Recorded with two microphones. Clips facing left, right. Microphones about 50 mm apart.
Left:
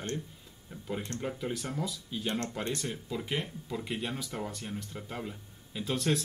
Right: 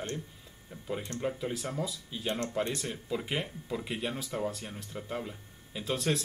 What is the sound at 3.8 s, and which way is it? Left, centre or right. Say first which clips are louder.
Speech: even; centre.